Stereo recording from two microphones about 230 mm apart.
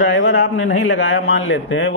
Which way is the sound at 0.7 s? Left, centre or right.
Left.